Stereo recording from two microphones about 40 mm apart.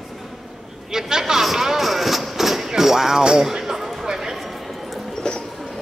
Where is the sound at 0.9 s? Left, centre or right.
Centre.